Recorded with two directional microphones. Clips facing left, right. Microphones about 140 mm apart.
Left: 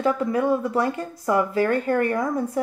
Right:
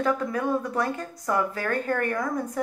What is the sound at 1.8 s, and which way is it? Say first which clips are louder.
Speech: left 5 dB; 25° left (ahead or behind).